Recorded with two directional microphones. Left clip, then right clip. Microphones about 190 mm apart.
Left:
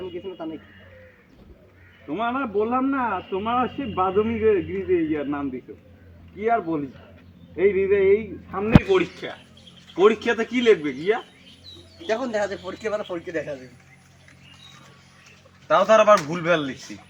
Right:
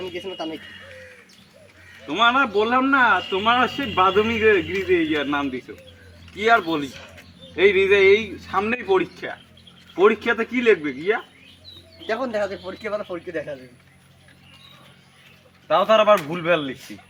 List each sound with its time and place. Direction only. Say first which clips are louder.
0.2 s speech: right 3 dB; 20° right (ahead or behind)
2.0 s a man's voice: right 8 dB; 5° right (ahead or behind)
8.9 s a man's voice: right 1 dB; centre (ahead or behind)
15.6 s speech: even; 15° left (ahead or behind)